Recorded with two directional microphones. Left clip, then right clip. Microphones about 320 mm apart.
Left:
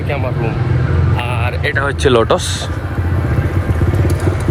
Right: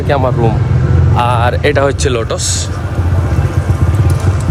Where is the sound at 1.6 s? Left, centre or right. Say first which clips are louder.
Right 3 dB; right.